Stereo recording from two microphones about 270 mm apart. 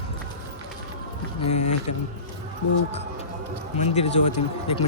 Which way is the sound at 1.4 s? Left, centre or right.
Left.